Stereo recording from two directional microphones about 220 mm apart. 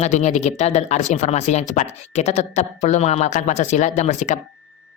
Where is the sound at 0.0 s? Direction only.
30° left (ahead or behind).